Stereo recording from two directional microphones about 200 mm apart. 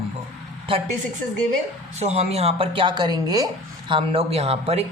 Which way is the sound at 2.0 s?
30° right (ahead or behind).